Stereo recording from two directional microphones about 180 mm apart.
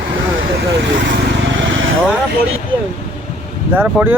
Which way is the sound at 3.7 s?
10° right (ahead or behind).